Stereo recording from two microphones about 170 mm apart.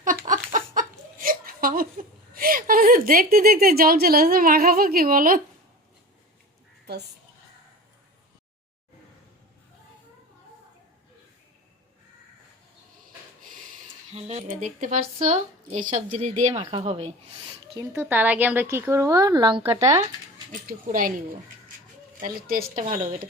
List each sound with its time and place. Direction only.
0.3 s speech: 50° right (ahead or behind)
14.1 s speech: 40° right (ahead or behind)
16.5 s speech: 30° right (ahead or behind)
17.7 s a woman's voice: 15° right (ahead or behind)
20.5 s speech: 55° right (ahead or behind)
22.2 s speech: 60° right (ahead or behind)
22.7 s speech: 35° right (ahead or behind)